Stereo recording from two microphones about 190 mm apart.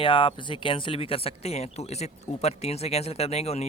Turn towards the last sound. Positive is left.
turn(degrees=35)  # may be behind; listen again after turning